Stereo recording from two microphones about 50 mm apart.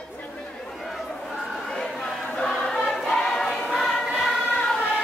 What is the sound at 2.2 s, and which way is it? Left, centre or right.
Choir, left.